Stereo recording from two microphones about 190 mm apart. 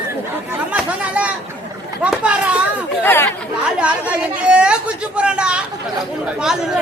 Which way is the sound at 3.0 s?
10° left (ahead or behind).